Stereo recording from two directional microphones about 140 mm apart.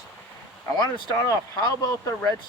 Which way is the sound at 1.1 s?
25° left (ahead or behind).